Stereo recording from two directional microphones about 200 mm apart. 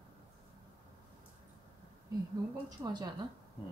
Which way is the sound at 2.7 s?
20° right (ahead or behind).